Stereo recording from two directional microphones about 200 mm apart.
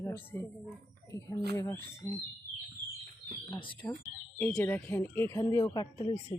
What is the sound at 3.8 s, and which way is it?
Speech, 10° left (ahead or behind).